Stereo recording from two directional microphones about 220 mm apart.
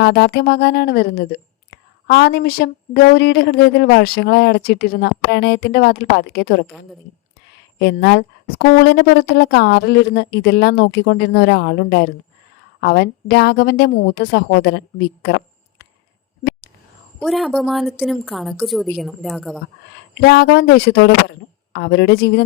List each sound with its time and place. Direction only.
0.0 s a woman's voice: 50° left (ahead or behind)
7.8 s a woman's voice: 50° left (ahead or behind)
17.2 s a woman's voice: centre (ahead or behind)
20.2 s a woman's voice: 45° left (ahead or behind)